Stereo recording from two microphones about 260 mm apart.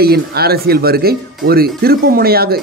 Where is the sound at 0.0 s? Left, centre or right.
Right.